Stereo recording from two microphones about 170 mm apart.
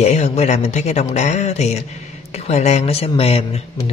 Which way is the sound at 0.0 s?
40° left (ahead or behind).